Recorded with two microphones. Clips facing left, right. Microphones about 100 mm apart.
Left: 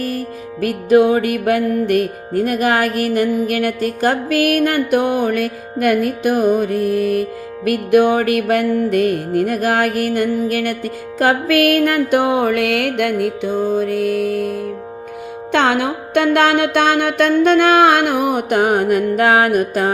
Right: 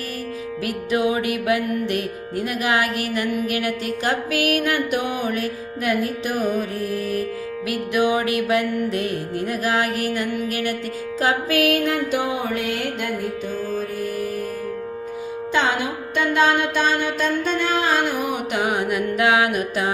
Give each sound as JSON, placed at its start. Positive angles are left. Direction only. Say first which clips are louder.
{"t": 0.6, "sound": "music", "louder": "left 10 dB", "side_deg": 45}
{"t": 11.2, "sound": "music", "louder": "left 6 dB", "side_deg": 60}
{"t": 15.5, "sound": "music", "louder": "left 6 dB", "side_deg": 65}